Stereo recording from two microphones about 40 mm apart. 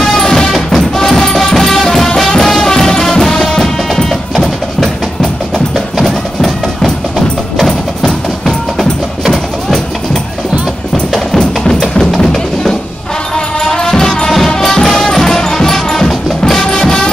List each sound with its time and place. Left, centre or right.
0.0 s music: centre
5.9 s music: centre
11.3 s music: centre
13.7 s music: centre